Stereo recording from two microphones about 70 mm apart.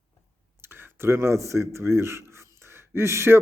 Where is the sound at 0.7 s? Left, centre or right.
Right.